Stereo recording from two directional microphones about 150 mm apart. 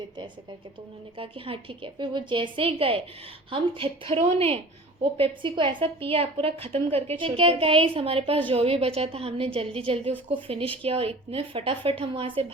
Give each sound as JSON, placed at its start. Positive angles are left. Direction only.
{"t": 1.2, "sound": "a woman's voice", "side_deg": -35}